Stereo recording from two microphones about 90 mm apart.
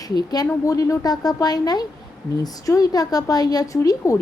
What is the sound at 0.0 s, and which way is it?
A woman's voice, 50° left (ahead or behind).